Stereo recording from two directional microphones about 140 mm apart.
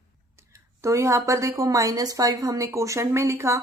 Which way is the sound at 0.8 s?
20° right (ahead or behind).